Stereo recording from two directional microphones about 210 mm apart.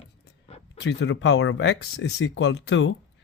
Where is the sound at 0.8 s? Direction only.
60° left (ahead or behind).